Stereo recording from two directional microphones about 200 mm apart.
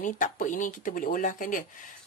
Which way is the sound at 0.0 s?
40° left (ahead or behind).